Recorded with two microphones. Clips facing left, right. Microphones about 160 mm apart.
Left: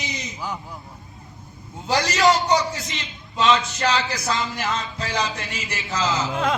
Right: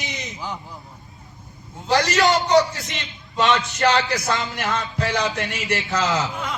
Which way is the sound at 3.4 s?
60° right (ahead or behind).